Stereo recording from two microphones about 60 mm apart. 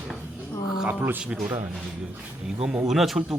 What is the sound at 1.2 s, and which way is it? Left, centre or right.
Speech, centre.